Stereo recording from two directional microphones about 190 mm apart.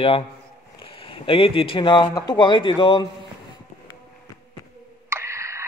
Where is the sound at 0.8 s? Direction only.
30° left (ahead or behind).